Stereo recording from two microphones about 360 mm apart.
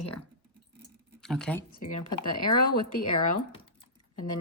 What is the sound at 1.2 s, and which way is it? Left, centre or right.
Speech, centre.